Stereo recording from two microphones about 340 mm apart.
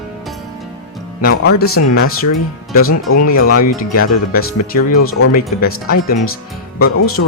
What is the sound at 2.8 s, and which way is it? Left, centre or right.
Speech, left.